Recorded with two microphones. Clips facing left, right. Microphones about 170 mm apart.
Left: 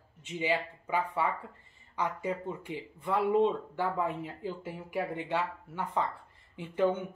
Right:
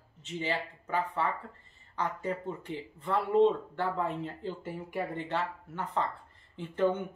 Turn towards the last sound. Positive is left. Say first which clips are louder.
# even
turn(degrees=10)  # may be behind; listen again after turning